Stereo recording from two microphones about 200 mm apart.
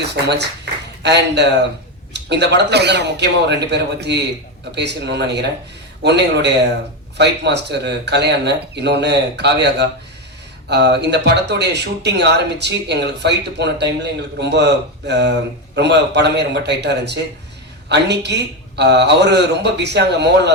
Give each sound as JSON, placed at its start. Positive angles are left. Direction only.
{"t": 0.3, "sound": "speech", "side_deg": -60}